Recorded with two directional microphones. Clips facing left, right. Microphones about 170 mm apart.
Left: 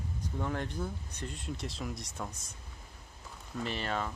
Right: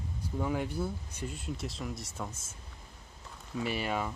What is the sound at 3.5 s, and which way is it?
Speech, 10° right (ahead or behind).